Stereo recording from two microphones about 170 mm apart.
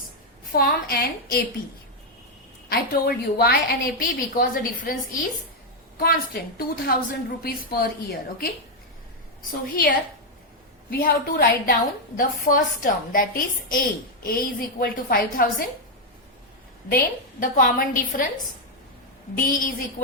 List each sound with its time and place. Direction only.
0.5 s a woman's voice: 60° left (ahead or behind)
2.6 s a woman's voice: 65° left (ahead or behind)
9.5 s a woman's voice: 55° left (ahead or behind)
10.9 s a woman's voice: 60° left (ahead or behind)
17.4 s a woman's voice: 55° left (ahead or behind)
19.4 s a woman's voice: 55° left (ahead or behind)